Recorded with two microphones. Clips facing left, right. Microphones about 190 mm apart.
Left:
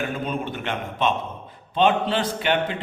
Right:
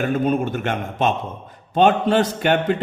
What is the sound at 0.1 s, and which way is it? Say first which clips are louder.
A man's voice: right 8 dB; 45° right (ahead or behind).